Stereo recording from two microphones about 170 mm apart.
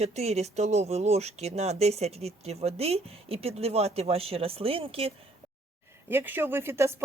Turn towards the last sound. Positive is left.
turn(degrees=-15)  # may be behind; listen again after turning